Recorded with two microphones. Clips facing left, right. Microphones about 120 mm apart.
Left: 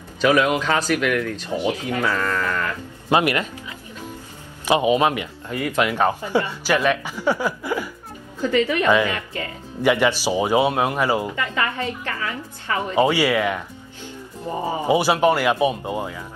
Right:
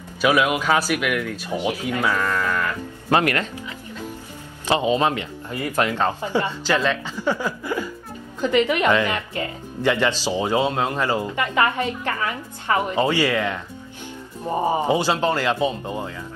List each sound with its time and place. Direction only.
0.2 s speech: 10° right (ahead or behind)
3.1 s speech: 15° left (ahead or behind)
4.6 s speech: 15° left (ahead or behind)
8.4 s a woman's voice: 20° right (ahead or behind)
9.8 s speech: 15° left (ahead or behind)
11.3 s a woman's voice: 25° right (ahead or behind)
12.9 s speech: 15° left (ahead or behind)
14.5 s a woman's voice: 20° right (ahead or behind)
14.9 s speech: 15° left (ahead or behind)